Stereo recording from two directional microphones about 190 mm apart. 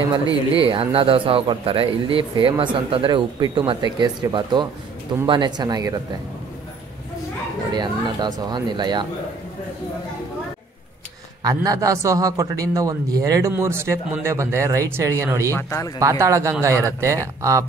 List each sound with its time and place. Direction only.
0.6 s speech: 30° right (ahead or behind)
7.7 s speech: 20° right (ahead or behind)
11.4 s a man's voice: 20° right (ahead or behind)
15.5 s speech: 15° left (ahead or behind)
16.0 s a man's voice: 15° right (ahead or behind)